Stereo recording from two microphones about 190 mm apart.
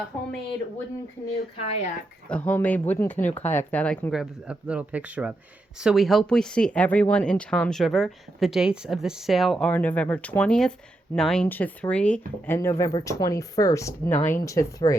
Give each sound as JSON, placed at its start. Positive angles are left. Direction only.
{"t": 1.5, "sound": "speech", "side_deg": 35}
{"t": 2.3, "sound": "speech", "side_deg": 10}